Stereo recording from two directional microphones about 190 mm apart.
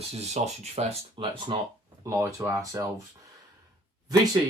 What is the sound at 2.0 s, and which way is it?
Speech, 15° right (ahead or behind).